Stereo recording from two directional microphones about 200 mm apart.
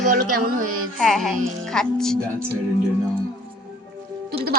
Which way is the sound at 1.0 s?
Centre (ahead or behind).